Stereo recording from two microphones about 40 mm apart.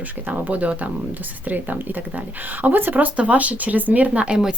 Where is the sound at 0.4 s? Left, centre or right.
Right.